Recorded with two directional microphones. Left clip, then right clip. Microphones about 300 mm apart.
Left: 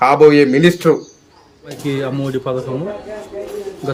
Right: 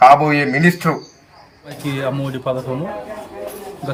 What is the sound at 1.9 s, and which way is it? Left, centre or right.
Speech, centre.